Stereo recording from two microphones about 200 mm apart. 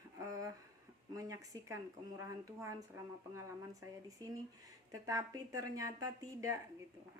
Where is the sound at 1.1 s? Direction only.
15° right (ahead or behind).